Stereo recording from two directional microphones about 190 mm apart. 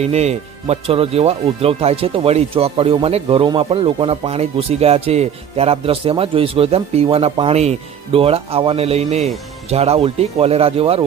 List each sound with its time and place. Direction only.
0.0 s speech: 35° right (ahead or behind)